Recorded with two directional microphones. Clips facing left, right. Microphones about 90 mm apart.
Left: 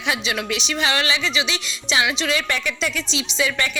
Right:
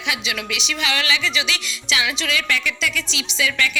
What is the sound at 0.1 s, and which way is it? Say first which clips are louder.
A woman's voice: left 3 dB; 35° left (ahead or behind).